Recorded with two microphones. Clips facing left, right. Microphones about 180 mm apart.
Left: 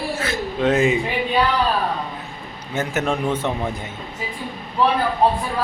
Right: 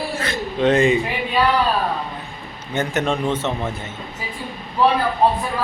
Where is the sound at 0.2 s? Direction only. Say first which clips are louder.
Right 3 dB; 5° left (ahead or behind).